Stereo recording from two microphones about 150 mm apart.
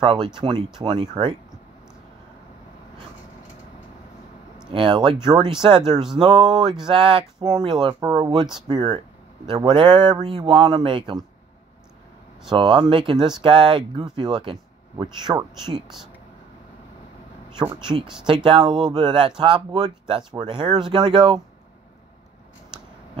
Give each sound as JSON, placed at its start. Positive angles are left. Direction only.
{"t": 0.0, "sound": "speech", "side_deg": -35}
{"t": 4.7, "sound": "speech", "side_deg": -35}
{"t": 12.4, "sound": "speech", "side_deg": -35}
{"t": 18.2, "sound": "speech", "side_deg": -35}